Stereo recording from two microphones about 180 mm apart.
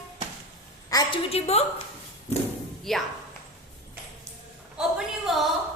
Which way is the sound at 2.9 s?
Centre (ahead or behind).